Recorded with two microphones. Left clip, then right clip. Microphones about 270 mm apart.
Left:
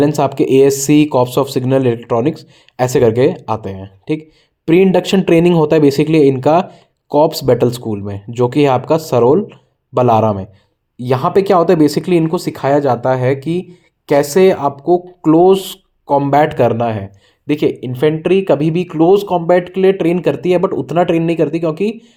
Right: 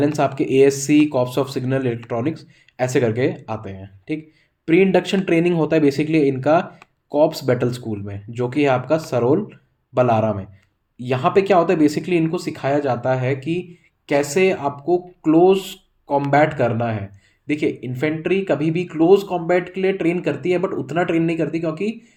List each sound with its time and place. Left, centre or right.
0.0 s speech: left